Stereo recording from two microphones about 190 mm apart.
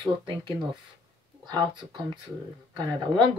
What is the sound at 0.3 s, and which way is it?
Speech, 25° right (ahead or behind).